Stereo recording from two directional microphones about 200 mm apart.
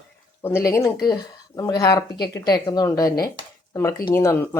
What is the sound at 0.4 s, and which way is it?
Speech, 10° left (ahead or behind).